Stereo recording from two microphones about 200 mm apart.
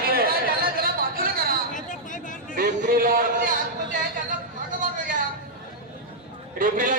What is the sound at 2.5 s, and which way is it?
Speech, 40° right (ahead or behind).